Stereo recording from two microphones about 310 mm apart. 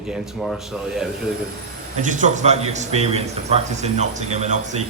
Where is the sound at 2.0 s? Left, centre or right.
Right.